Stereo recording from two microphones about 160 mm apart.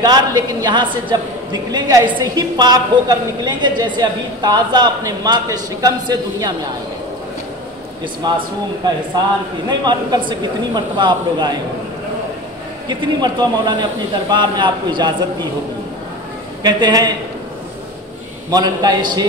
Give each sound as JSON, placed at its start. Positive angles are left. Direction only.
{"t": 0.0, "sound": "a woman's voice", "side_deg": -25}
{"t": 8.2, "sound": "a woman's voice", "side_deg": -25}
{"t": 9.7, "sound": "a woman's voice", "side_deg": -25}
{"t": 12.8, "sound": "a woman's voice", "side_deg": -25}
{"t": 16.6, "sound": "a woman's voice", "side_deg": -25}
{"t": 18.5, "sound": "a woman's voice", "side_deg": -25}